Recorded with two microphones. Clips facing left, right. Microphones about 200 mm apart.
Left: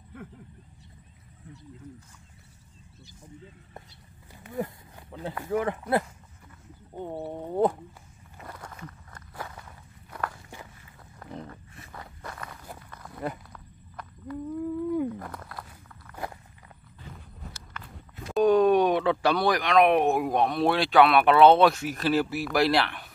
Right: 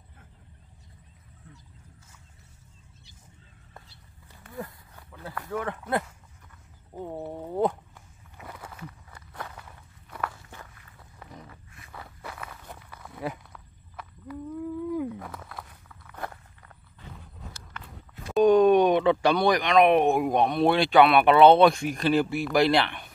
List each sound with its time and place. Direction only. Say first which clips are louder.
0.1 s vehicle: left 17 dB; 70° left (ahead or behind)
4.4 s a sound: left 6 dB; 20° left (ahead or behind)
7.0 s speech: left 1 dB; centre (ahead or behind)
8.4 s wild animals: even; 5° right (ahead or behind)
9.3 s walk: even; 5° left (ahead or behind)
10.3 s walk: left 2 dB; 15° left (ahead or behind)
11.9 s walk: even; 5° right (ahead or behind)
18.3 s speech: right 2 dB; centre (ahead or behind)